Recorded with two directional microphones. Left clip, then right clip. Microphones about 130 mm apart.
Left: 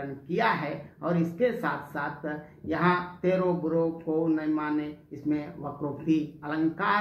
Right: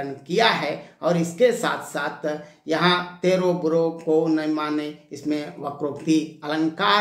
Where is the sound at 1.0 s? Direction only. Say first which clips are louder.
Right 8 dB; 25° right (ahead or behind).